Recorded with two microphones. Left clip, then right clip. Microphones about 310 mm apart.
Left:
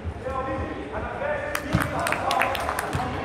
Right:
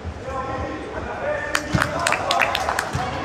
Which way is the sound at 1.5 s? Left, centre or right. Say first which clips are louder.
Right 4 dB; right.